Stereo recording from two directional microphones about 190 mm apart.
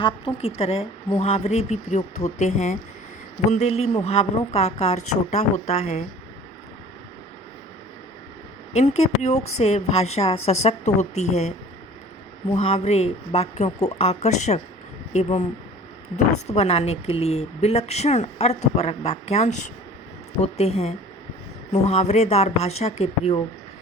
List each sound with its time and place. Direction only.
0.0 s speech: 25° left (ahead or behind)
8.7 s speech: 35° left (ahead or behind)
12.6 s speech: 35° left (ahead or behind)
16.5 s speech: 35° left (ahead or behind)